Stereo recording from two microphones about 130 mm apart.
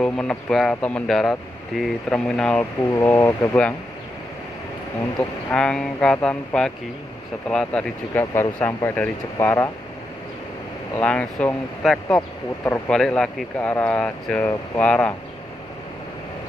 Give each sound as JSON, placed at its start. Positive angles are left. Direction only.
{"t": 0.0, "sound": "speech", "side_deg": 5}
{"t": 3.0, "sound": "speech", "side_deg": 20}
{"t": 5.5, "sound": "speech", "side_deg": 5}
{"t": 11.0, "sound": "speech", "side_deg": 10}
{"t": 12.6, "sound": "speech", "side_deg": 20}
{"t": 12.9, "sound": "speech", "side_deg": 5}